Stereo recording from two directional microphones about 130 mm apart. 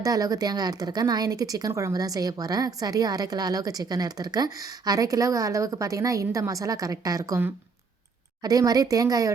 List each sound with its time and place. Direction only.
0.0 s speech: 30° right (ahead or behind)